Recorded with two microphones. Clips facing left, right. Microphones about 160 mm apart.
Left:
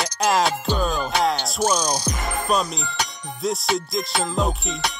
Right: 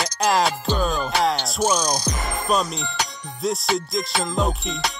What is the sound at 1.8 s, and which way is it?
Music, 10° left (ahead or behind).